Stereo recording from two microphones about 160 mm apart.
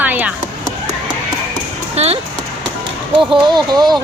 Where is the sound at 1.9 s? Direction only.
40° right (ahead or behind).